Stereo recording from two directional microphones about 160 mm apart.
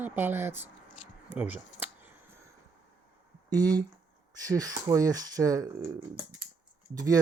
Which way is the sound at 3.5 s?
25° right (ahead or behind).